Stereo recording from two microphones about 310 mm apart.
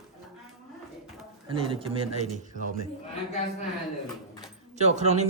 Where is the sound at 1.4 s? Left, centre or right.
Centre.